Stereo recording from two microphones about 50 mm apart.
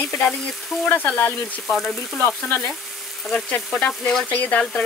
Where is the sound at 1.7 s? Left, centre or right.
Centre.